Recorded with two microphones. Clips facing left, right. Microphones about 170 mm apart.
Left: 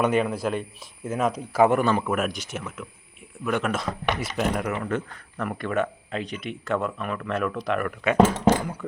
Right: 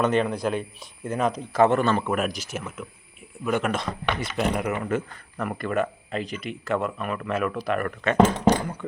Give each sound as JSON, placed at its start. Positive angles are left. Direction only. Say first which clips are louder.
{"t": 0.0, "sound": "speech", "louder": "even", "side_deg": 10}
{"t": 2.1, "sound": "speech", "louder": "even", "side_deg": 0}